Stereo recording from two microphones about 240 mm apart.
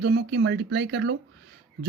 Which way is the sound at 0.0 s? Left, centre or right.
Right.